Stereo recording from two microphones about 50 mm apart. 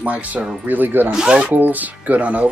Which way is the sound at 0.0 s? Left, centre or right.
Right.